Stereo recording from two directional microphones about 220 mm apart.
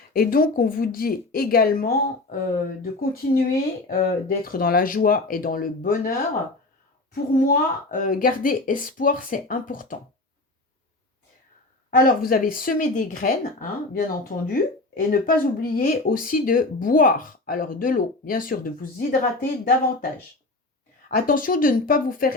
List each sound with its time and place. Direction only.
0.1 s speech: 40° left (ahead or behind)
11.9 s speech: 40° left (ahead or behind)
21.2 s speech: 40° left (ahead or behind)